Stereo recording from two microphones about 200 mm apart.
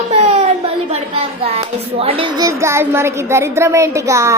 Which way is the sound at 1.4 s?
30° right (ahead or behind).